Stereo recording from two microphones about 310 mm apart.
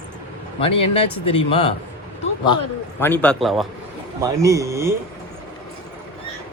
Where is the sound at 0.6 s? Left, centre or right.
Centre.